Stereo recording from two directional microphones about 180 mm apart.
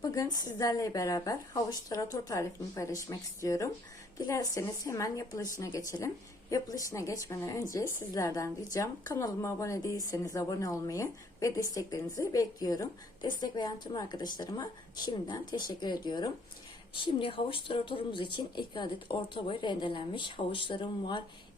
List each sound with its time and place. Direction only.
0.0 s a woman's voice: 20° left (ahead or behind)